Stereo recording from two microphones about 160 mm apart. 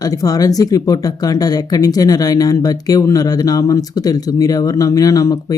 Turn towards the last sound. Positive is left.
turn(degrees=20)  # may be behind; listen again after turning